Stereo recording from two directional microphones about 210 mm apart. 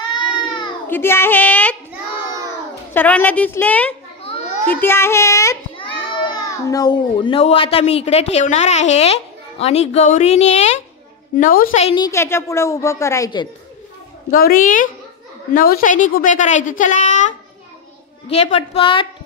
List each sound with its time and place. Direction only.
0.1 s a sound: 20° left (ahead or behind)
0.8 s a woman's voice: 10° left (ahead or behind)
2.9 s a woman's voice: 10° left (ahead or behind); by 10.7 s 30° left (ahead or behind)
11.3 s a woman's voice: 40° left (ahead or behind)
11.8 s a woman's voice: 20° left (ahead or behind)
14.3 s a woman's voice: 40° left (ahead or behind); by 19.0 s 25° left (ahead or behind)